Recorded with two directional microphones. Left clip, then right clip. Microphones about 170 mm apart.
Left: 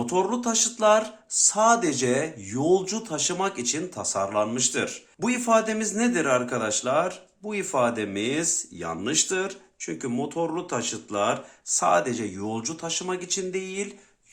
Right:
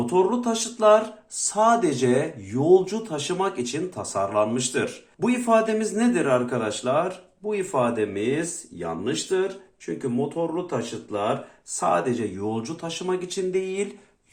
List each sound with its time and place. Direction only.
0.0 s speech: 30° left (ahead or behind); by 11.3 s 50° left (ahead or behind)
11.8 s speech: 35° left (ahead or behind); by 13.8 s 15° left (ahead or behind)